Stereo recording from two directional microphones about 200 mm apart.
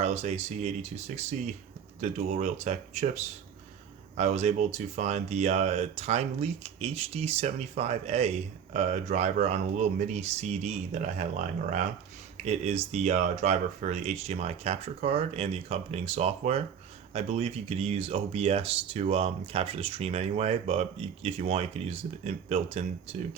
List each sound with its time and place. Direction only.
0.0 s speech: 35° right (ahead or behind)
4.2 s speech: 35° right (ahead or behind)